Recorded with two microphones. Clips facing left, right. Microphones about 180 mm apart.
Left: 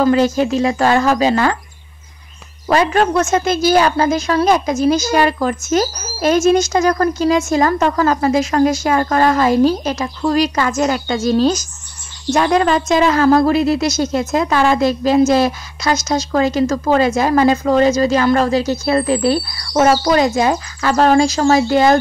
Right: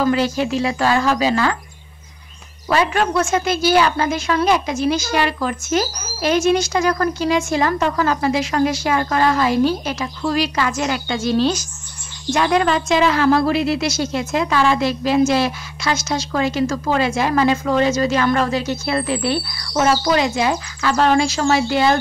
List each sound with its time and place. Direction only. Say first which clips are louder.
0.0 s a woman's voice: left 4 dB; 40° left (ahead or behind)
2.7 s a woman's voice: left 4 dB; 40° left (ahead or behind)